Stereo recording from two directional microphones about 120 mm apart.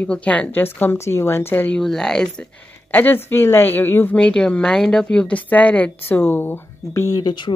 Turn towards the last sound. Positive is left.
turn(degrees=40)  # may be behind; listen again after turning